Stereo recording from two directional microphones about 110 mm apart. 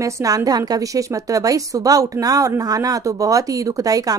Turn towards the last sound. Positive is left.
turn(degrees=-35)  # may be behind; listen again after turning